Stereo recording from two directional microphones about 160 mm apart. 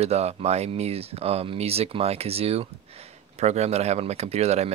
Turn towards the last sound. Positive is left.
turn(degrees=-40)  # may be behind; listen again after turning